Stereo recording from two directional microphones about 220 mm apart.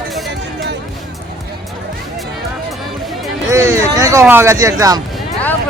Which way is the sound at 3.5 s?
15° right (ahead or behind).